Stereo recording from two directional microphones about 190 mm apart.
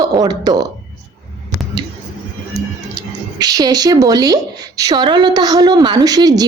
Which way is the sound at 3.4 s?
20° right (ahead or behind).